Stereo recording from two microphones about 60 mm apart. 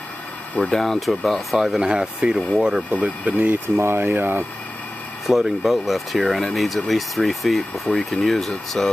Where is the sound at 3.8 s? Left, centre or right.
Right.